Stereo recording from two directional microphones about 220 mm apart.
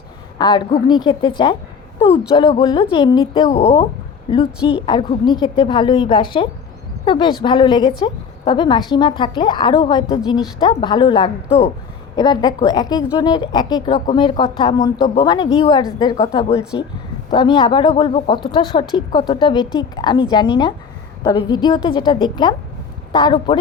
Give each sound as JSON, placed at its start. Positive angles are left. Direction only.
{"t": 0.3, "sound": "a woman's voice", "side_deg": 20}